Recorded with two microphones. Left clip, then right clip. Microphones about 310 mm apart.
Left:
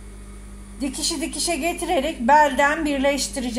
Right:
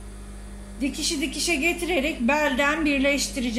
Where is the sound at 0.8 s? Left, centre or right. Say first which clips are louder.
Left 1 dB; left.